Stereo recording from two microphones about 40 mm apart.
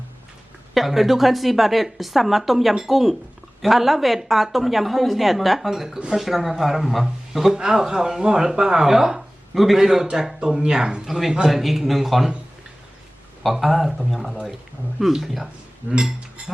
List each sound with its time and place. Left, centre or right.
0.7 s a woman's voice: centre
13.4 s a woman's voice: centre
15.9 s speech: centre